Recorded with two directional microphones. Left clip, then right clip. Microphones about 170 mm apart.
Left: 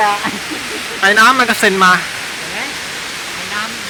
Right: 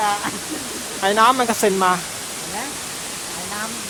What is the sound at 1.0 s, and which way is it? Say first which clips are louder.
Speech: left 6 dB; 15° right (ahead or behind).